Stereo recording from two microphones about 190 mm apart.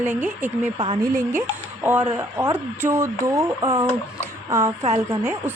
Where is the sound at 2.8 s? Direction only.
15° right (ahead or behind).